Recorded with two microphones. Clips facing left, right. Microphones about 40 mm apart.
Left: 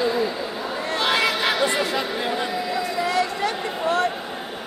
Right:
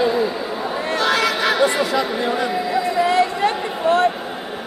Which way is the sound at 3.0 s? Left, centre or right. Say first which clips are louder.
Right 5 dB; right.